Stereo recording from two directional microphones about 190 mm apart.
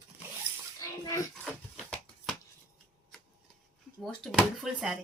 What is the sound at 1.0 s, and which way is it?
Speech, 15° left (ahead or behind).